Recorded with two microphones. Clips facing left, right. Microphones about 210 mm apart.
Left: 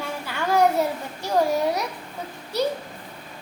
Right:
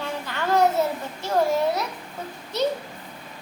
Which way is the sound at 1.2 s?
15° left (ahead or behind).